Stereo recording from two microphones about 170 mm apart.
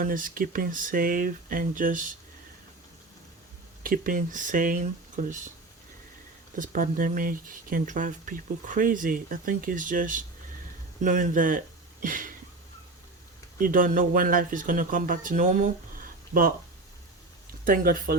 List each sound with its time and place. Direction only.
0.0 s speech: 55° right (ahead or behind)
3.8 s speech: 55° right (ahead or behind)
6.6 s speech: 55° right (ahead or behind)
13.6 s speech: 55° right (ahead or behind)
17.7 s speech: 55° right (ahead or behind)